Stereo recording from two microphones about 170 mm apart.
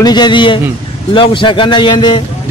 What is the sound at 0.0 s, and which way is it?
A man's voice, 25° left (ahead or behind).